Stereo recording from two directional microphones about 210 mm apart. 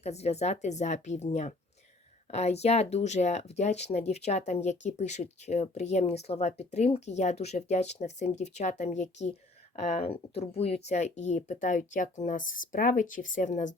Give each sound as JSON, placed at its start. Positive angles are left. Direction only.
{"t": 0.0, "sound": "speech", "side_deg": 30}